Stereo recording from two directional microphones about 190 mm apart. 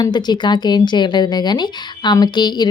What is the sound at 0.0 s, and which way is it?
Speech, 20° left (ahead or behind).